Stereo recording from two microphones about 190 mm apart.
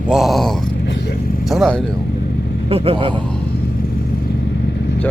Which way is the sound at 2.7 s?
30° right (ahead or behind).